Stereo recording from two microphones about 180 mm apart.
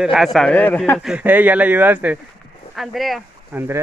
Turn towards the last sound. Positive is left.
turn(degrees=-10)  # may be behind; listen again after turning